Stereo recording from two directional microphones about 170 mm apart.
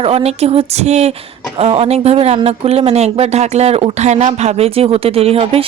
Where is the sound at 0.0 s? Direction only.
35° right (ahead or behind).